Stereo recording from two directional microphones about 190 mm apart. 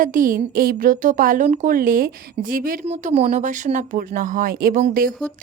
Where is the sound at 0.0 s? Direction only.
45° right (ahead or behind).